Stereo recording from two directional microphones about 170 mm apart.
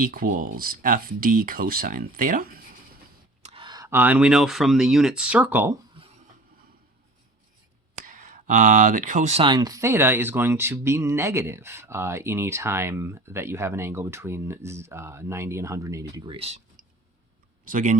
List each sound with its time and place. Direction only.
0.0 s speech: 55° right (ahead or behind)
3.4 s speech: 30° right (ahead or behind); by 5.7 s 10° right (ahead or behind)
8.0 s speech: 50° right (ahead or behind)
9.5 s speech: 20° right (ahead or behind)
17.7 s speech: 50° right (ahead or behind)